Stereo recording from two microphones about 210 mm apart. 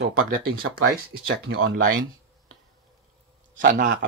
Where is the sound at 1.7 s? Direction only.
40° right (ahead or behind).